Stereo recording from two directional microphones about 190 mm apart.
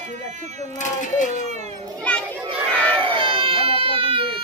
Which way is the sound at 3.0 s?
25° right (ahead or behind).